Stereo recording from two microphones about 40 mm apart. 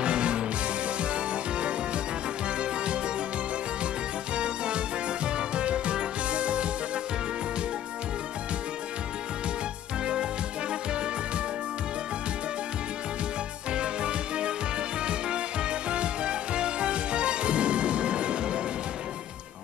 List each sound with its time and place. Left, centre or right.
0.0 s music: right
4.4 s music: right
13.7 s music: right